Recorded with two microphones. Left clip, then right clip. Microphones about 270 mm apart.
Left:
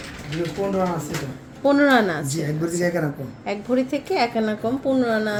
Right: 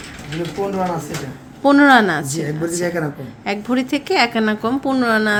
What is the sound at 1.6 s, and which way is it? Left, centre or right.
A woman's voice, right.